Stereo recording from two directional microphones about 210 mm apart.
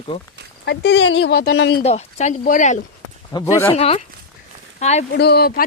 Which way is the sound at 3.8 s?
30° left (ahead or behind).